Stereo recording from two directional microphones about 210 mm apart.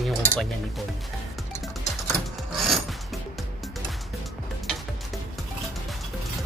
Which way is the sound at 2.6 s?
Centre (ahead or behind).